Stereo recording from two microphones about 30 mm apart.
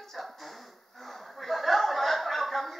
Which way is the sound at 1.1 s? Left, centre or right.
Centre.